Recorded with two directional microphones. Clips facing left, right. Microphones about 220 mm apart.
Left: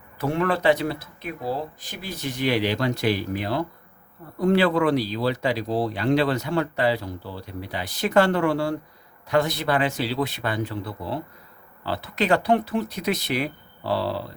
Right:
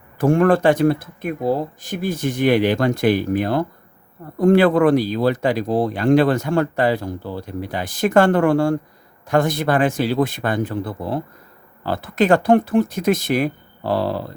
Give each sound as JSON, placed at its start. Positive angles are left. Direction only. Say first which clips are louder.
{"t": 0.2, "sound": "speech", "louder": "right 8 dB", "side_deg": -50}